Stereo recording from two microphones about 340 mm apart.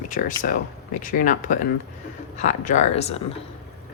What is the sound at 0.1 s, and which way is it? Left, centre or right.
A woman's voice, left.